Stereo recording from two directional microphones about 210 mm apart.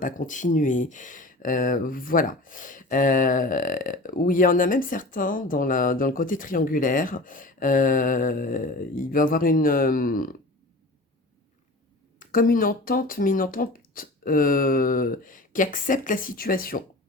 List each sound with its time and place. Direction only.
0.0 s speech: 40° left (ahead or behind)
12.2 s speech: 40° left (ahead or behind)